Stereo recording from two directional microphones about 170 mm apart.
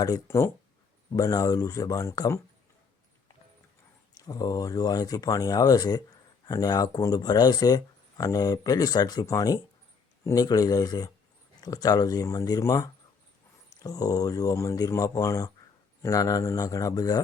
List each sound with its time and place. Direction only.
0.0 s speech: 20° left (ahead or behind)
4.1 s speech: 20° left (ahead or behind)